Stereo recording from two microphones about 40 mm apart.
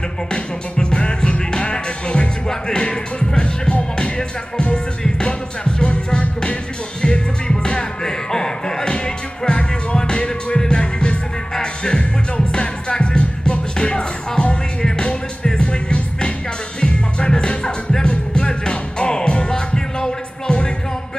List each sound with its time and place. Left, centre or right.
0.3 s music: left